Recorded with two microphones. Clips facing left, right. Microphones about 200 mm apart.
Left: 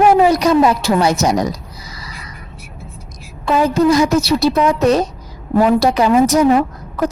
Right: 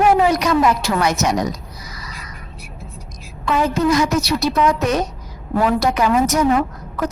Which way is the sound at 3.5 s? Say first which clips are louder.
Left 4 dB; 35° left (ahead or behind).